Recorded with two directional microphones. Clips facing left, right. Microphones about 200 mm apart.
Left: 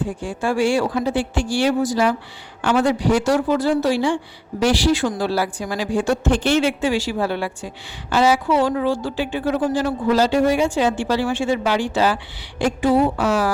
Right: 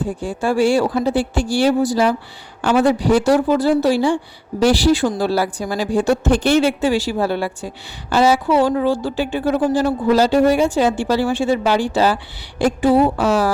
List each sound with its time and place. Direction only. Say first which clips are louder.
0.0 s speech: right 2 dB; 35° right (ahead or behind)